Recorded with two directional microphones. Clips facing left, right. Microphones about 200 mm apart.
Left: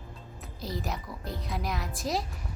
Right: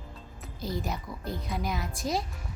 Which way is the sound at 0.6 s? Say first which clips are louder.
Right 2 dB; centre (ahead or behind).